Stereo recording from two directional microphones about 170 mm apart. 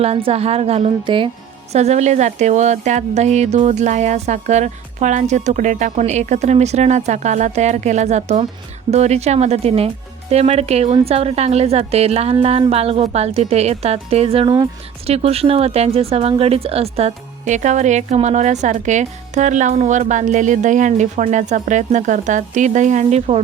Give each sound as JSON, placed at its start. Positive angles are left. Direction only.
{"t": 0.0, "sound": "speech", "side_deg": -35}
{"t": 1.7, "sound": "speech", "side_deg": -40}